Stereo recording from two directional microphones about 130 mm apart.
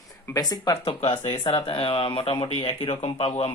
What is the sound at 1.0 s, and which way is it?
Speech, 55° left (ahead or behind).